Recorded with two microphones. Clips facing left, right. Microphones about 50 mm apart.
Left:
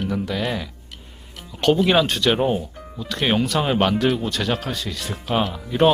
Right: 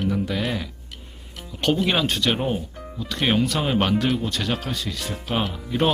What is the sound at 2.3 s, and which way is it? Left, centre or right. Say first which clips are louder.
Speech: left 4 dB; centre.